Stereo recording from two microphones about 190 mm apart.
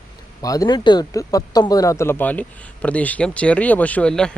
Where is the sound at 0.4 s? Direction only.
20° left (ahead or behind).